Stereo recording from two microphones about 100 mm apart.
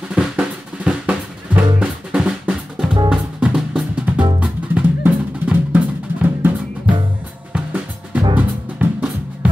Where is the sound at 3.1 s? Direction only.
5° right (ahead or behind).